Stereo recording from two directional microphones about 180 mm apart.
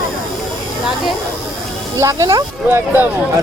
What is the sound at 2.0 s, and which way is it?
Speech, 15° right (ahead or behind).